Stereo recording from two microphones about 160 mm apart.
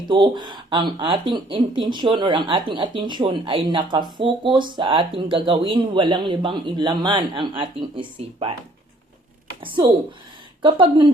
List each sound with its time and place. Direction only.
0.1 s speech: 30° right (ahead or behind)
9.6 s speech: 30° right (ahead or behind)